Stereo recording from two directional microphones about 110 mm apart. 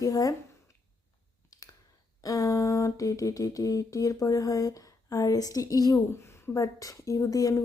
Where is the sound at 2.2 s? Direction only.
30° left (ahead or behind).